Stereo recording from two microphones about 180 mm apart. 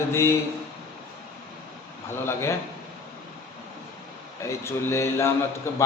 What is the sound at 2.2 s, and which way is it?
Speech, 15° left (ahead or behind).